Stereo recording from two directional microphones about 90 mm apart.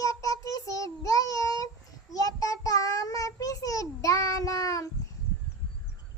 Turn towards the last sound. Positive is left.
turn(degrees=40)  # may be behind; listen again after turning